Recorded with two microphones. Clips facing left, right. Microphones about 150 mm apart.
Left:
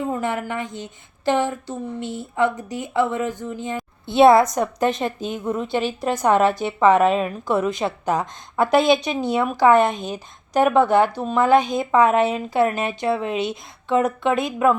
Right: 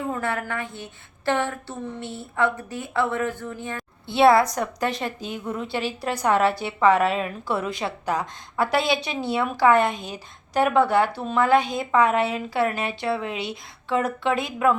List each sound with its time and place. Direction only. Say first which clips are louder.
0.1 s a woman's voice: left 3 dB; 15° left (ahead or behind)